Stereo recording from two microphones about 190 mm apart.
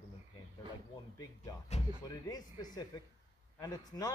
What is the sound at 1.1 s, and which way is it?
Speech, 15° left (ahead or behind).